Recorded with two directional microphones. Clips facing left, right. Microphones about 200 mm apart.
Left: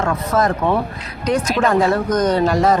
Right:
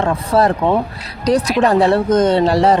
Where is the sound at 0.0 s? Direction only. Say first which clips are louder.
Right 3 dB; 35° right (ahead or behind).